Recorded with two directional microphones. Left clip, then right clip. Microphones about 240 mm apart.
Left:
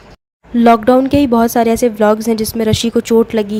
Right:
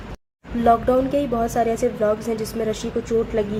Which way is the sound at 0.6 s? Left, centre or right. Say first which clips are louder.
Left 7 dB; left.